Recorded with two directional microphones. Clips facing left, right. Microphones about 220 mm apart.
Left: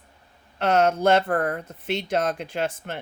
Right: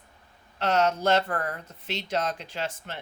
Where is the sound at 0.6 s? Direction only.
55° left (ahead or behind).